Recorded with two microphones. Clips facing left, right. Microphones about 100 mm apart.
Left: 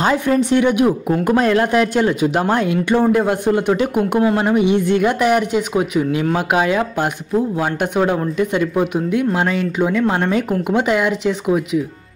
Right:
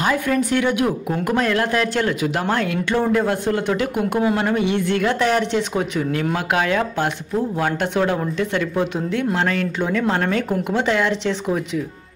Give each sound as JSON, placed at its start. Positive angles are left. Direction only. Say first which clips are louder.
{"t": 0.0, "sound": "speech", "louder": "left 4 dB", "side_deg": 25}